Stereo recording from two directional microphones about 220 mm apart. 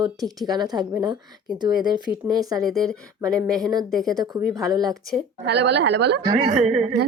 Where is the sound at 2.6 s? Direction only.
Centre (ahead or behind).